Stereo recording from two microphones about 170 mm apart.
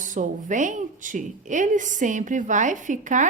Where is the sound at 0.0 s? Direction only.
50° right (ahead or behind).